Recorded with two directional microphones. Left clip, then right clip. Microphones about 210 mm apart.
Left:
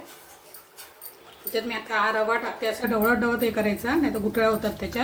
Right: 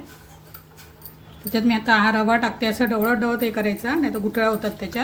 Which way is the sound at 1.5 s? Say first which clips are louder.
Right 8 dB; 45° right (ahead or behind).